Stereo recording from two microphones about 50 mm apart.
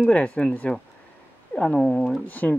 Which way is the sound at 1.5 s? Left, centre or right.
Centre.